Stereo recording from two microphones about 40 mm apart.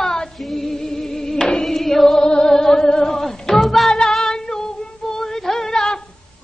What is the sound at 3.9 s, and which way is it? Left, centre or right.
Music, centre.